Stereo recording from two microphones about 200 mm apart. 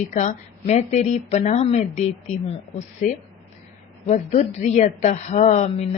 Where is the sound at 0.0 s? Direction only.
35° left (ahead or behind).